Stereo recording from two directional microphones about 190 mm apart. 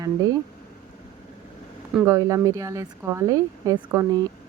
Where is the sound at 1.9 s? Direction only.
10° right (ahead or behind).